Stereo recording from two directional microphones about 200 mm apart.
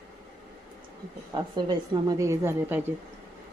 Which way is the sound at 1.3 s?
20° right (ahead or behind).